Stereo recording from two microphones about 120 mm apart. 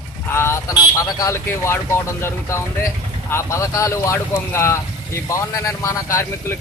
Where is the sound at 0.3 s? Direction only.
20° left (ahead or behind).